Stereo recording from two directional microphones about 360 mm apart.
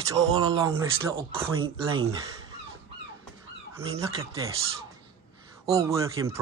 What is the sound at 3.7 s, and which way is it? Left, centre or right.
Speech, centre.